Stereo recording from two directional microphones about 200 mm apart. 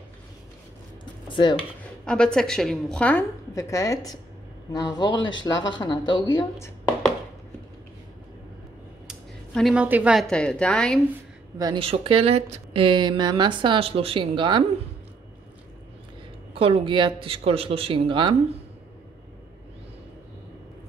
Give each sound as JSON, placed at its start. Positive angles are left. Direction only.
{"t": 1.3, "sound": "speech", "side_deg": 25}
{"t": 2.0, "sound": "a woman's voice", "side_deg": 5}
{"t": 9.0, "sound": "speech", "side_deg": 0}
{"t": 11.5, "sound": "speech", "side_deg": -20}
{"t": 16.5, "sound": "speech", "side_deg": -30}